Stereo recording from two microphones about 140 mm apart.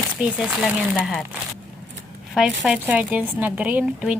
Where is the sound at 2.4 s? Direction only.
Centre (ahead or behind).